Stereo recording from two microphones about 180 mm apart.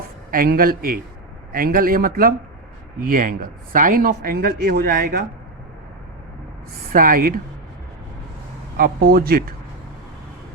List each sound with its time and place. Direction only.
0.3 s a man's voice: 50° right (ahead or behind)
6.9 s a man's voice: 50° right (ahead or behind)
8.8 s speech: 55° right (ahead or behind)